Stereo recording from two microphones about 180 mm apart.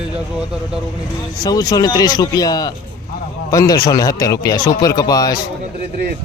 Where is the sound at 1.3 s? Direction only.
20° left (ahead or behind).